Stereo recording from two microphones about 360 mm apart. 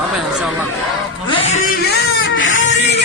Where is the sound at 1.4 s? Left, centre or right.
Centre.